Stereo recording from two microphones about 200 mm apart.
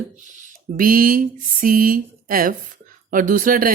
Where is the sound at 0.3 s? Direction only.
40° right (ahead or behind).